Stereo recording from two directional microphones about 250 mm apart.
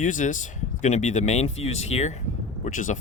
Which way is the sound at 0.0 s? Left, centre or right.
Left.